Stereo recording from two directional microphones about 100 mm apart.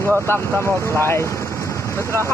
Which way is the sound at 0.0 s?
25° left (ahead or behind).